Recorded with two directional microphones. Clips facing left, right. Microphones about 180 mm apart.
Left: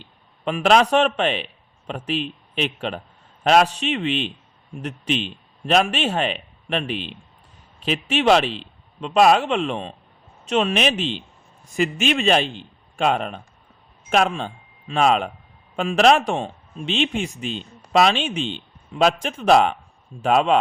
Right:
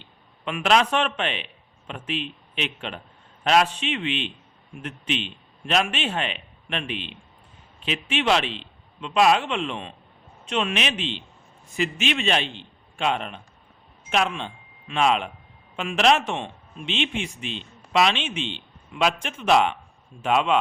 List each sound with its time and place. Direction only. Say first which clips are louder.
0.0 s a man's voice: left 6 dB; 35° left (ahead or behind)